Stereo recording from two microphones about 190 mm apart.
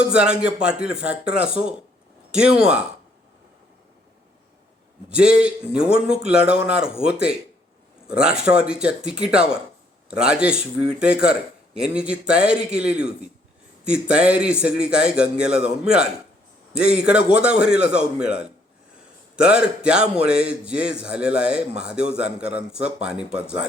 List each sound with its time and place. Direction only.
0.0 s a man's voice: 5° right (ahead or behind)
5.0 s a man's voice: 5° right (ahead or behind)